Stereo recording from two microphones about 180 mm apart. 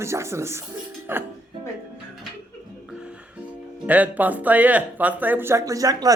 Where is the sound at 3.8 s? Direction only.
10° right (ahead or behind).